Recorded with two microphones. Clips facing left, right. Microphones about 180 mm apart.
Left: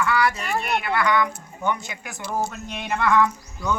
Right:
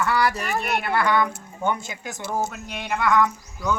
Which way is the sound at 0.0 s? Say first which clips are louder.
Even; 35° right (ahead or behind).